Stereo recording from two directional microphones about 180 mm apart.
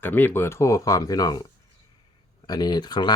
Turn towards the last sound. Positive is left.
turn(degrees=25)  # may be behind; listen again after turning